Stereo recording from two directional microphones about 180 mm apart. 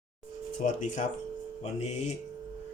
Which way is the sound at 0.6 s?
45° left (ahead or behind).